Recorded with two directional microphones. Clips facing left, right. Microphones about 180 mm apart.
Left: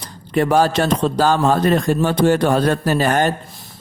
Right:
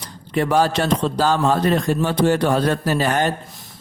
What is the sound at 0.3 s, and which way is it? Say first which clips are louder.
Speech: left 3 dB; 45° left (ahead or behind).